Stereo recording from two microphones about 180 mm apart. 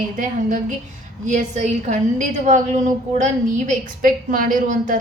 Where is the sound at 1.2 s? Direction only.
45° right (ahead or behind).